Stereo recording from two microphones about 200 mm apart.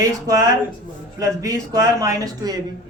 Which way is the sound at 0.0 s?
15° right (ahead or behind).